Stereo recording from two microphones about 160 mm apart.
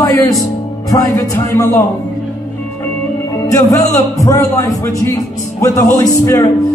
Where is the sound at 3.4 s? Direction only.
20° left (ahead or behind).